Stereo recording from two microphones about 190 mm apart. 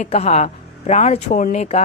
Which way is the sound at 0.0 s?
35° left (ahead or behind).